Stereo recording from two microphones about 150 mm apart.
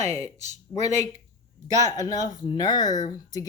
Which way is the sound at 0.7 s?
15° left (ahead or behind).